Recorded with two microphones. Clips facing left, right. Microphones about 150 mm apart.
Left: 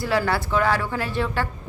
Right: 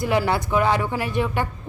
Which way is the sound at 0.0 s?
20° right (ahead or behind).